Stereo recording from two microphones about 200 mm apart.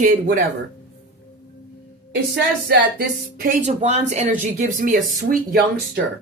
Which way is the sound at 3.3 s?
45° right (ahead or behind).